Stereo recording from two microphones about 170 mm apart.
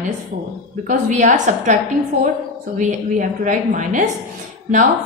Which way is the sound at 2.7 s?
50° right (ahead or behind).